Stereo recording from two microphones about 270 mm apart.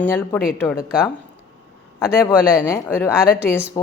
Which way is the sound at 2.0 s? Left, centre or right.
Centre.